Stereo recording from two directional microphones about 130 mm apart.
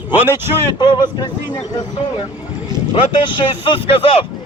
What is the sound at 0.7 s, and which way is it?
Speech, 35° left (ahead or behind).